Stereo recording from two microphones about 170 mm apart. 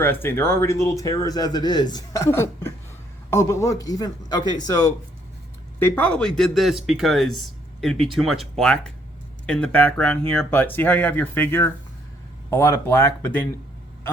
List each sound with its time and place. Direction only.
0.0 s a man's voice: 15° left (ahead or behind)
5.9 s speech: 5° left (ahead or behind)